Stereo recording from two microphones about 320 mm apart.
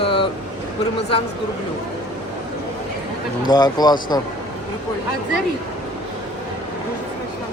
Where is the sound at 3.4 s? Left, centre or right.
Centre.